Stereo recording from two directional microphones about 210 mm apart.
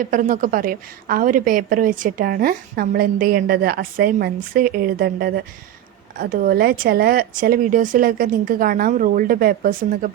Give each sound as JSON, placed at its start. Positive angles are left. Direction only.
{"t": 0.0, "sound": "a woman's voice", "side_deg": -40}